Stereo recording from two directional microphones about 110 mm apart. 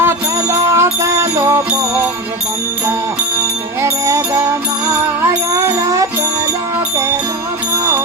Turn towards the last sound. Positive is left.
turn(degrees=-30)  # may be behind; listen again after turning